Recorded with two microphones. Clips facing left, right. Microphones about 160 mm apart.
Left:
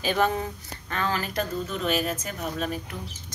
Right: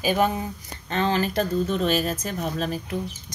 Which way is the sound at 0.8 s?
25° right (ahead or behind).